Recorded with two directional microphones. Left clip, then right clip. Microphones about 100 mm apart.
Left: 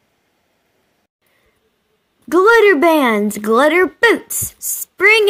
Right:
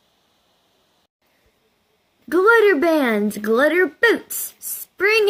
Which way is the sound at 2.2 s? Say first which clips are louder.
Left 4 dB; 5° left (ahead or behind).